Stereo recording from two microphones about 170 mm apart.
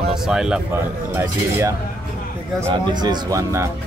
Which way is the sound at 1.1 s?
15° right (ahead or behind).